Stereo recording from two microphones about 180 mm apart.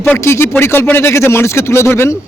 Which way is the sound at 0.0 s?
15° left (ahead or behind).